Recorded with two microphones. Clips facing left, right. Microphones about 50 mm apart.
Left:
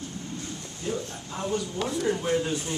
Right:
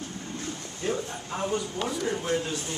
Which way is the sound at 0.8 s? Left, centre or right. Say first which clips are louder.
Right 2 dB; right.